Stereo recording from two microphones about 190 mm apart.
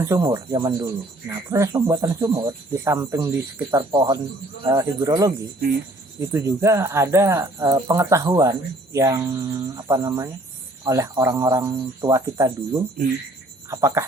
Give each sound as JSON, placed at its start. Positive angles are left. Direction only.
{"t": 0.0, "sound": "speech", "side_deg": -20}